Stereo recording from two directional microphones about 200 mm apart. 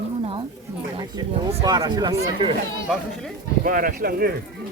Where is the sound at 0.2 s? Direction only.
30° right (ahead or behind).